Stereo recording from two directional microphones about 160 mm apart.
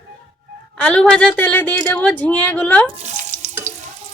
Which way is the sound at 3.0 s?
50° right (ahead or behind).